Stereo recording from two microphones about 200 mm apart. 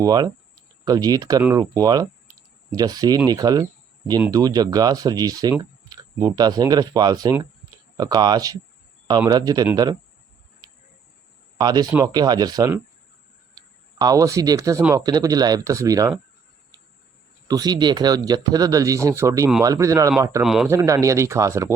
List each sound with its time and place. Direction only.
0.0 s speech: 20° right (ahead or behind)
11.5 s speech: 20° right (ahead or behind)
14.0 s speech: 15° right (ahead or behind)
17.5 s speech: 20° right (ahead or behind)
20.4 s speech: centre (ahead or behind)
20.7 s speech: 15° right (ahead or behind)